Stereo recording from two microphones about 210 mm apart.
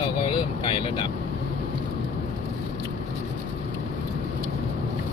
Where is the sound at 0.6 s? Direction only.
25° left (ahead or behind).